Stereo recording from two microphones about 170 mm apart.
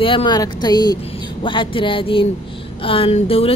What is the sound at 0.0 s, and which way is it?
Speech, 30° left (ahead or behind).